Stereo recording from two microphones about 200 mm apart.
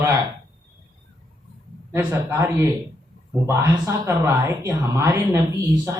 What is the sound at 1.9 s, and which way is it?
Speech, 15° right (ahead or behind).